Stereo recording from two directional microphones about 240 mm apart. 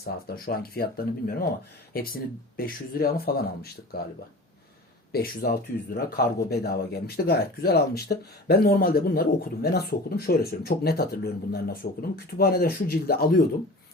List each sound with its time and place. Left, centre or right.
0.4 s speech: left
5.1 s speech: left